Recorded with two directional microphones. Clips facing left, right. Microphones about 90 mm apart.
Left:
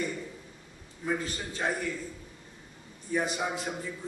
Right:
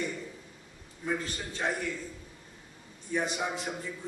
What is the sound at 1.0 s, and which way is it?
Speech, 5° left (ahead or behind).